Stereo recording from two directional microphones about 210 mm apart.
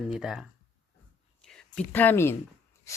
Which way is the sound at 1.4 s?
5° left (ahead or behind).